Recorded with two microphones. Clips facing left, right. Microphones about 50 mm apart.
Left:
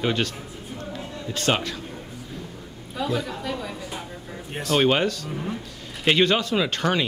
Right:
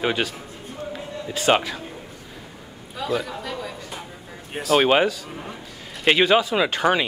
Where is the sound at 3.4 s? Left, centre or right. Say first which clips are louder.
Left 1 dB; centre.